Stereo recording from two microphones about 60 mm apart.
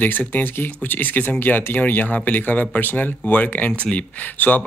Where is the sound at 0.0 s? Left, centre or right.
Left.